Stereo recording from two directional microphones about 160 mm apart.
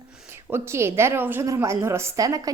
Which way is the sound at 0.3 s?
15° right (ahead or behind).